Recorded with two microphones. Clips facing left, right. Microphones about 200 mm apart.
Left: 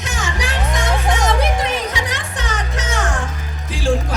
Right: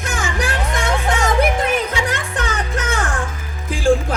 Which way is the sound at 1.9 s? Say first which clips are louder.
Right 3 dB; 55° right (ahead or behind).